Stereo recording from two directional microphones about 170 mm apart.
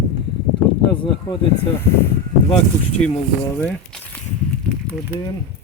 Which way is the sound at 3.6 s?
10° left (ahead or behind).